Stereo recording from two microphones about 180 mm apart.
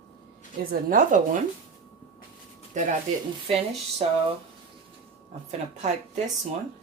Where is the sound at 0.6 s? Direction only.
50° right (ahead or behind).